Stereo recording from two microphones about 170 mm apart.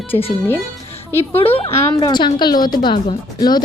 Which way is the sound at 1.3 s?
10° left (ahead or behind).